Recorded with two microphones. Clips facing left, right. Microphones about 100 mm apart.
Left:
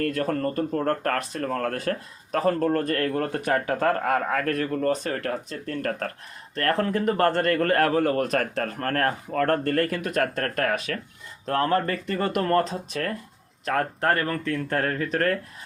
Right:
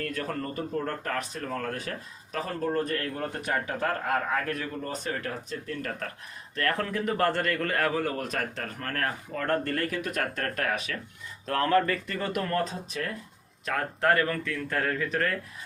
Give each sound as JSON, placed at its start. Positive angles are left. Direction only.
{"t": 0.0, "sound": "speech", "side_deg": 50}
{"t": 4.5, "sound": "speech", "side_deg": 55}
{"t": 6.6, "sound": "speech", "side_deg": 40}
{"t": 11.4, "sound": "speech", "side_deg": 35}
{"t": 13.7, "sound": "speech", "side_deg": 45}